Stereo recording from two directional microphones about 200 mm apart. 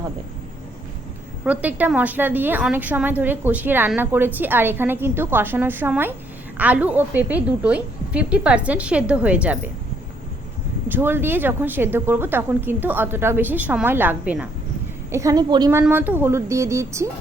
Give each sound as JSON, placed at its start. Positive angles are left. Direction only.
{"t": 1.5, "sound": "a woman's voice", "side_deg": -5}
{"t": 10.8, "sound": "a woman's voice", "side_deg": -10}
{"t": 15.8, "sound": "a woman's voice", "side_deg": -10}